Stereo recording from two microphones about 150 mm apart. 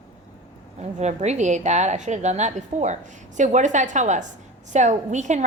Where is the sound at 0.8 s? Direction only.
50° right (ahead or behind).